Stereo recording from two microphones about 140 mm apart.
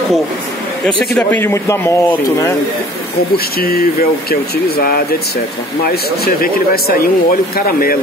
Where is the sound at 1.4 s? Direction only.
20° left (ahead or behind).